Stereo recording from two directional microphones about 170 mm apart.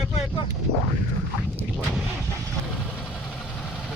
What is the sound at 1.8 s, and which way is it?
Speech, centre (ahead or behind).